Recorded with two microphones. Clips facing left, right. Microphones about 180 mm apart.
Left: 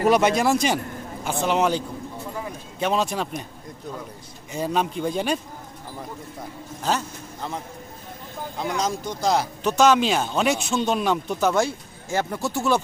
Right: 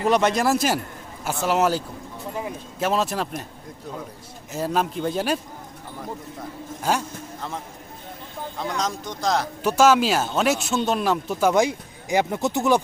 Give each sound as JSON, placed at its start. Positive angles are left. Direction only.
{"t": 0.0, "sound": "speech", "side_deg": 5}
{"t": 4.5, "sound": "speech", "side_deg": 0}
{"t": 6.9, "sound": "a man's voice", "side_deg": -10}
{"t": 8.5, "sound": "speech", "side_deg": 5}